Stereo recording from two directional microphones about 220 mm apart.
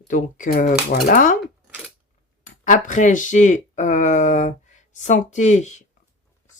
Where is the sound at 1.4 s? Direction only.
5° right (ahead or behind).